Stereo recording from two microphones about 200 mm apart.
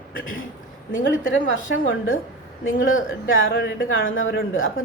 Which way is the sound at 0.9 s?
75° left (ahead or behind).